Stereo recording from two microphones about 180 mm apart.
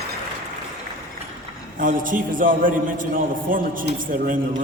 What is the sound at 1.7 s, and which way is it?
A man's voice, 50° right (ahead or behind).